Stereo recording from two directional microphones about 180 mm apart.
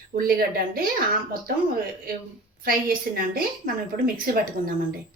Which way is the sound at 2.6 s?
55° right (ahead or behind).